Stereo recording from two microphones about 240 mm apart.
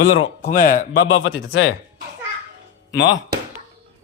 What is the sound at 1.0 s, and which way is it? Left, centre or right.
Speech, left.